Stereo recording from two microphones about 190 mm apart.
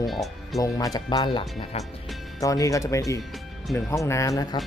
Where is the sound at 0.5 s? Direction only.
20° left (ahead or behind).